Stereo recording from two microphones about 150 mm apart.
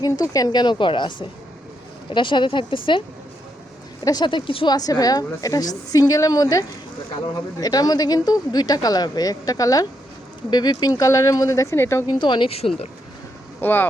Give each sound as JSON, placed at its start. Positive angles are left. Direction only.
{"t": 0.0, "sound": "a woman's voice", "side_deg": 25}
{"t": 2.1, "sound": "speech", "side_deg": 30}
{"t": 4.0, "sound": "a woman's voice", "side_deg": 25}
{"t": 12.0, "sound": "speech", "side_deg": 30}
{"t": 13.6, "sound": "speech", "side_deg": 15}